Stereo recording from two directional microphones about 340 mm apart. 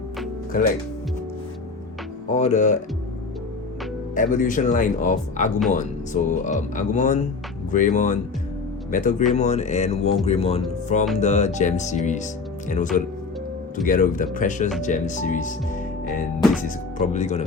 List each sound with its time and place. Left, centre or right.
0.5 s speech: left
2.3 s speech: left
4.1 s speech: left